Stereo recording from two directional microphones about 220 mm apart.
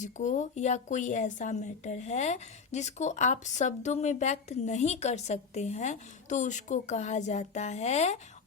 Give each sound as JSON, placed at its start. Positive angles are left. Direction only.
{"t": 0.0, "sound": "a woman's voice", "side_deg": 35}